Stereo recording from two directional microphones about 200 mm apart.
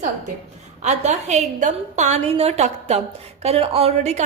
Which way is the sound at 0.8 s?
35° right (ahead or behind).